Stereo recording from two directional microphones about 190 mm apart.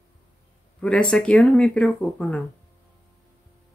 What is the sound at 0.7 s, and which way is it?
Speech, 5° left (ahead or behind).